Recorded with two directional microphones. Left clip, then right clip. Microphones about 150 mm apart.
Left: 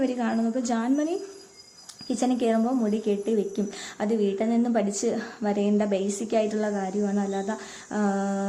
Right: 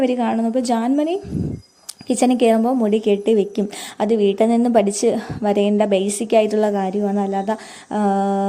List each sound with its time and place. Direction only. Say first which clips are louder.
0.0 s speech: right 8 dB; 45° right (ahead or behind)